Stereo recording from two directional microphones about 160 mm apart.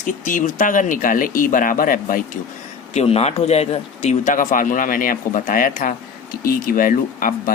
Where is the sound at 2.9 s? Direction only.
40° left (ahead or behind).